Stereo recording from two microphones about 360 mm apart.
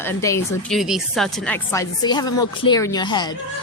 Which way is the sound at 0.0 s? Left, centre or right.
Centre.